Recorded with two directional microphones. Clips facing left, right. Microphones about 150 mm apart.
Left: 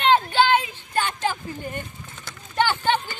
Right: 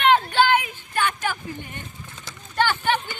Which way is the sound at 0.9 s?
30° left (ahead or behind).